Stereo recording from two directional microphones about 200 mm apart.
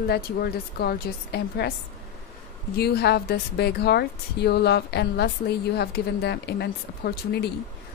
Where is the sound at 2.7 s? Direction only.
55° left (ahead or behind).